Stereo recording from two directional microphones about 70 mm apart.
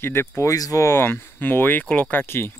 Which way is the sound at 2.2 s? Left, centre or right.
Left.